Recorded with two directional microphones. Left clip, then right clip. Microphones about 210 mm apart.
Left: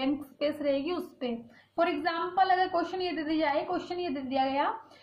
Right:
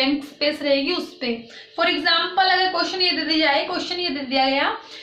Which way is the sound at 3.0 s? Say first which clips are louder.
Right 10 dB; 45° left (ahead or behind).